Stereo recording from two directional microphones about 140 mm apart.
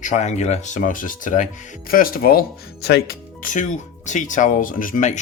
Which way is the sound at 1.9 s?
90° left.